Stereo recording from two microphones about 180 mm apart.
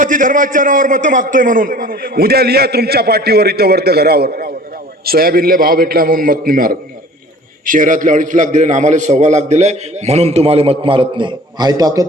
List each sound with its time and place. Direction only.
0.0 s a man's voice: 45° right (ahead or behind); by 12.0 s 20° right (ahead or behind)